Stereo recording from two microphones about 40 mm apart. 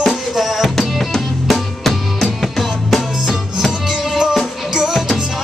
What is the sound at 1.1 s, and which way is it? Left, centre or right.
Music, centre.